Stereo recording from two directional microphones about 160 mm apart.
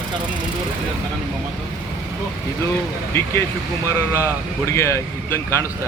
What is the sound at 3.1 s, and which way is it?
Speech, 15° left (ahead or behind).